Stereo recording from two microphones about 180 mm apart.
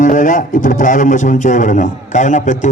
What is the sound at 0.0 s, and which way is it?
A man's voice, 45° left (ahead or behind).